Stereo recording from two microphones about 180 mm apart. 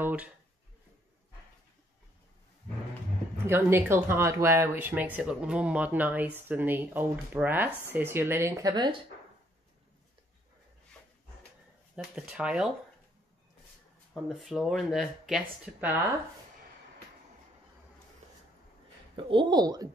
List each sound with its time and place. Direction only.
0.0 s speech: 10° right (ahead or behind)
3.4 s speech: 15° right (ahead or behind)
11.9 s speech: 5° right (ahead or behind)
14.1 s speech: centre (ahead or behind)
18.2 s a sound: 40° right (ahead or behind)
19.1 s speech: 25° right (ahead or behind)